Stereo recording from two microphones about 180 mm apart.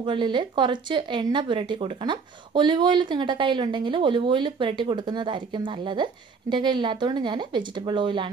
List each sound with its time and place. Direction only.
0.0 s speech: 25° right (ahead or behind)